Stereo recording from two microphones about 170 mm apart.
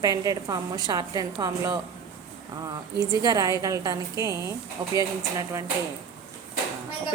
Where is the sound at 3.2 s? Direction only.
20° right (ahead or behind).